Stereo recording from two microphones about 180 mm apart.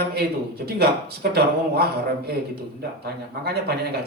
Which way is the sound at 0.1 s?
60° right (ahead or behind).